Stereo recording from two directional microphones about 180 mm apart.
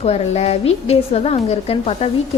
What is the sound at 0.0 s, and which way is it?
A woman's voice, 35° left (ahead or behind).